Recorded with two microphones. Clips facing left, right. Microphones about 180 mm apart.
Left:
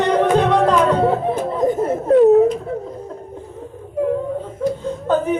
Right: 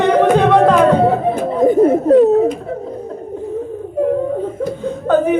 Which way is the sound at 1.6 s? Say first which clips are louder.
Right 8 dB; 60° right (ahead or behind).